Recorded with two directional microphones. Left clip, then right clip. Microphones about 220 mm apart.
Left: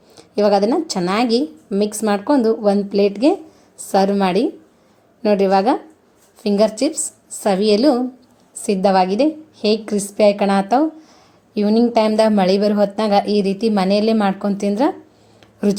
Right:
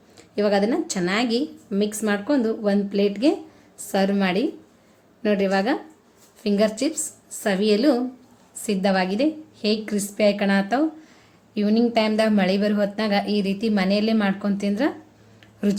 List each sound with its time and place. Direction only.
0.2 s a woman's voice: 25° left (ahead or behind)